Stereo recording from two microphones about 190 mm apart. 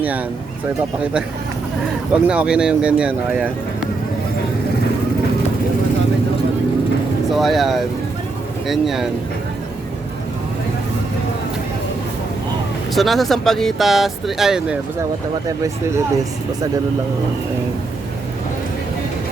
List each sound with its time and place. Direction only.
2.2 s speech: 5° right (ahead or behind)
7.3 s speech: centre (ahead or behind)
12.9 s speech: centre (ahead or behind)
15.4 s speech: 15° right (ahead or behind)